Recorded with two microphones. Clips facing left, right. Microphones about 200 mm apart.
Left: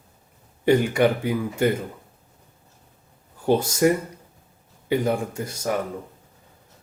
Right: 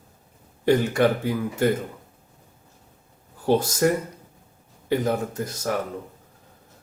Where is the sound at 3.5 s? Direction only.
10° left (ahead or behind).